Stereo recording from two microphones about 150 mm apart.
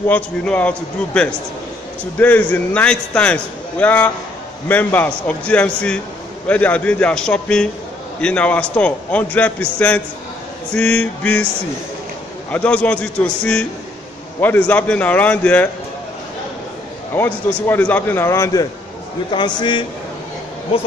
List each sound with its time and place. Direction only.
0.1 s a man's voice: 10° left (ahead or behind)
12.4 s a man's voice: 10° left (ahead or behind)
17.1 s a man's voice: 15° left (ahead or behind); by 19.9 s 30° left (ahead or behind)